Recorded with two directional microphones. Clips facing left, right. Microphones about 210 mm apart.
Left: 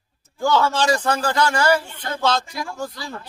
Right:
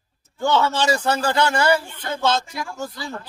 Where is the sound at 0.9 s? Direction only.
10° right (ahead or behind).